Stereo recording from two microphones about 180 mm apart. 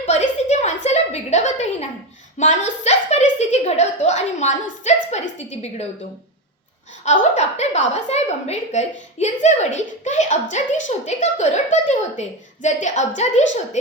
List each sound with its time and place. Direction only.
0.0 s a sound: 40° left (ahead or behind)
2.4 s a woman's voice: 40° left (ahead or behind)
7.0 s a woman's voice: 40° left (ahead or behind)